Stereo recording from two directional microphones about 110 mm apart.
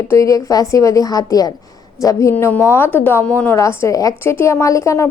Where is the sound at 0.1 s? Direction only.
30° left (ahead or behind).